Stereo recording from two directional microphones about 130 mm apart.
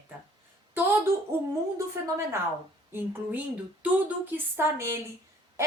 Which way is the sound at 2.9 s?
15° right (ahead or behind).